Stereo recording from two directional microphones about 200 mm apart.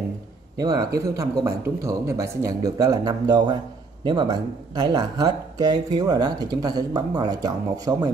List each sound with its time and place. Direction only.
0.6 s speech: 20° right (ahead or behind)